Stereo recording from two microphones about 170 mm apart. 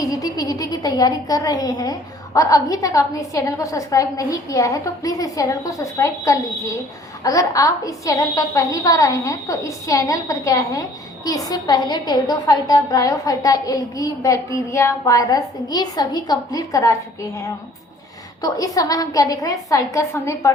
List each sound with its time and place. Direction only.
0.1 s a woman's voice: 20° left (ahead or behind)